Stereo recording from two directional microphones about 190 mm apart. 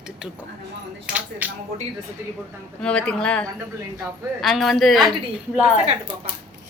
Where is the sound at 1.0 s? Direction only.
10° right (ahead or behind).